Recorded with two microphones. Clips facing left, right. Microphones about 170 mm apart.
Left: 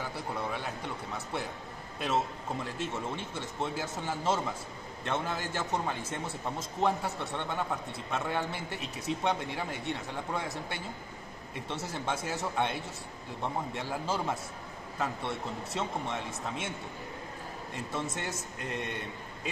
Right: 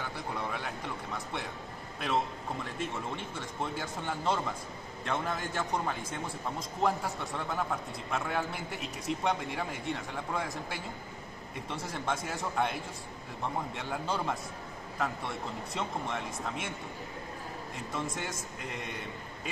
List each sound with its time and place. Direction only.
0.4 s speech: centre (ahead or behind)
2.8 s speech: centre (ahead or behind)
13.7 s speech: centre (ahead or behind)
17.9 s speech: centre (ahead or behind)